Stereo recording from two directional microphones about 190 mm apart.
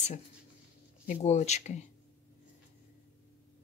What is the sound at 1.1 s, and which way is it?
Speech, 35° left (ahead or behind).